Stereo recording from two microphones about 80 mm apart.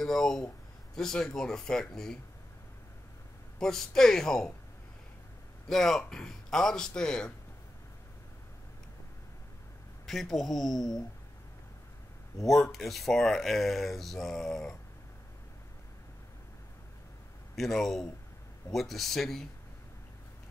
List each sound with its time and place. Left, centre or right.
0.0 s a man's voice: centre
3.5 s speech: centre
5.7 s a man's voice: centre
10.0 s speech: centre
12.4 s speech: centre
17.6 s speech: centre